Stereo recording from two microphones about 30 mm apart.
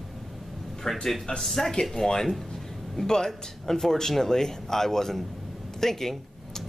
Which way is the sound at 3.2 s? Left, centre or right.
Centre.